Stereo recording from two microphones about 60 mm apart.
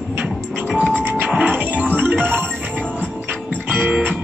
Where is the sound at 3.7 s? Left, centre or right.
Right.